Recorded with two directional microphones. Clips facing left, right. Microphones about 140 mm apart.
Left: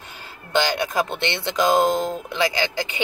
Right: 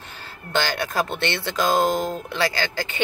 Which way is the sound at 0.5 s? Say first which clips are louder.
Left 3 dB; 15° left (ahead or behind).